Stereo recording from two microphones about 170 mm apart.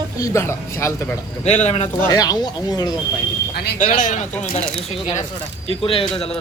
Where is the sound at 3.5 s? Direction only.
60° left (ahead or behind).